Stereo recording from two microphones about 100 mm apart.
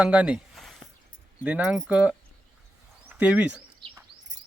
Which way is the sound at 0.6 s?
Centre (ahead or behind).